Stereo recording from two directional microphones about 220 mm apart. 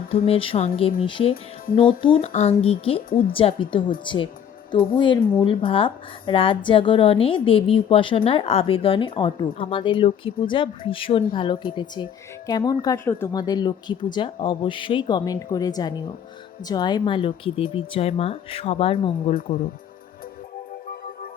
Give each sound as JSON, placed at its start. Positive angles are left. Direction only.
{"t": 0.3, "sound": "a woman's voice", "side_deg": 25}
{"t": 3.1, "sound": "a woman's voice", "side_deg": 40}
{"t": 3.3, "sound": "a woman's voice", "side_deg": 25}